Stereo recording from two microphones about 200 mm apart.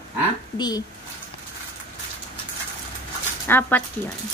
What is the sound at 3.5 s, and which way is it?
Speech, 10° left (ahead or behind).